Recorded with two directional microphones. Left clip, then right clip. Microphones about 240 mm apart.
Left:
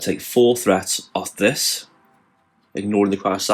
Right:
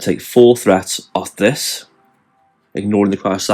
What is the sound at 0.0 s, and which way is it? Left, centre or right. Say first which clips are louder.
Speech: right 6 dB; right.